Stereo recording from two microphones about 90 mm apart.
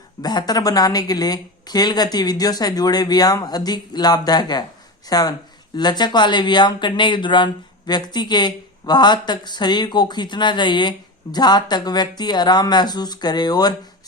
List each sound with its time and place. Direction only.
0.2 s speech: 50° left (ahead or behind)